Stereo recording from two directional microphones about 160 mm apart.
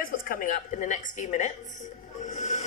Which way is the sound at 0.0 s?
60° left (ahead or behind).